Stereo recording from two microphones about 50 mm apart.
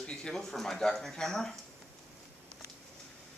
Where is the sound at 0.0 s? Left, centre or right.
Centre.